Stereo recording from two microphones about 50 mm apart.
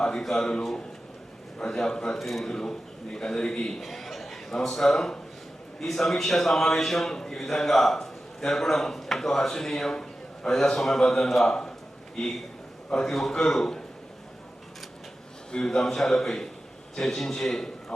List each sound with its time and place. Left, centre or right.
0.0 s a man's voice: centre
2.1 s a man's voice: centre
2.5 s a man's voice: centre
3.8 s chuckle: centre
4.6 s a man's voice: centre
12.9 s a man's voice: centre
15.5 s a man's voice: centre